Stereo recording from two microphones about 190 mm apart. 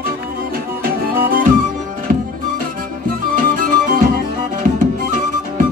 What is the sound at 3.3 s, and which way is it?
Music, 45° right (ahead or behind).